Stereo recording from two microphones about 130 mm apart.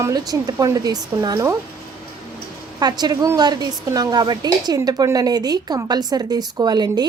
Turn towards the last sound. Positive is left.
turn(degrees=-30)  # may be behind; listen again after turning